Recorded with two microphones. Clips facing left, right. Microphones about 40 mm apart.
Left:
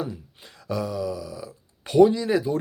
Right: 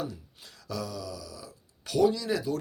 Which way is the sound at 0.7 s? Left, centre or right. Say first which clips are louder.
Left 8 dB; left.